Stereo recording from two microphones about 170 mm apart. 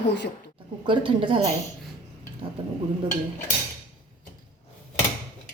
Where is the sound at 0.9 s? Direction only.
30° right (ahead or behind).